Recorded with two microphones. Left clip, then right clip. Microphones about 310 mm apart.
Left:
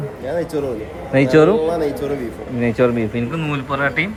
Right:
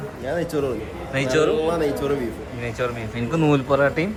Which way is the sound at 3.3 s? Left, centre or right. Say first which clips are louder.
Right 3 dB; centre.